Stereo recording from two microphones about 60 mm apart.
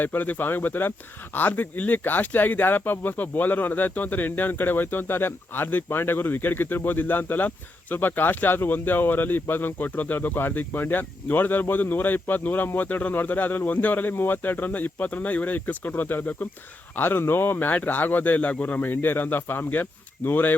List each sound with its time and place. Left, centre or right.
0.0 s speech: left